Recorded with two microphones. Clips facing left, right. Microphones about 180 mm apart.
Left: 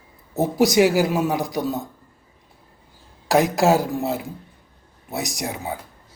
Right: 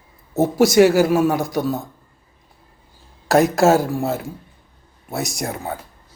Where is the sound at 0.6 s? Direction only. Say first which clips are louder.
Right 4 dB; 15° left (ahead or behind).